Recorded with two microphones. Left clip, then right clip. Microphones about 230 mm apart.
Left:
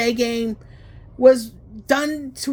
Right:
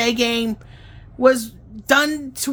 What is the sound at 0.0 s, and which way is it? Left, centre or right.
Speech, centre.